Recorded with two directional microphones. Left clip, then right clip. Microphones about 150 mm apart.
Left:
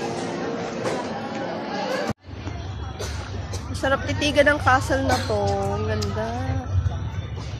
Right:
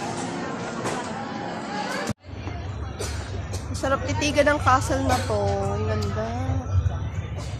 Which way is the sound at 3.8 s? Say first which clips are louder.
Left 2 dB; 5° left (ahead or behind).